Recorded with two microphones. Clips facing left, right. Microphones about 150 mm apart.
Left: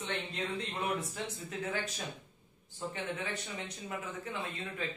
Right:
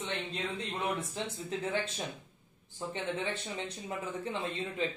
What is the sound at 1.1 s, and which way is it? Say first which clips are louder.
Speech: right 3 dB; 25° right (ahead or behind).